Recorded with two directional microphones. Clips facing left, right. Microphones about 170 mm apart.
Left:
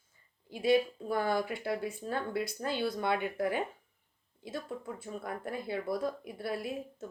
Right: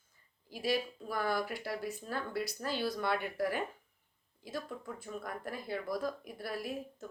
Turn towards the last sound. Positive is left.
turn(degrees=25)  # may be behind; listen again after turning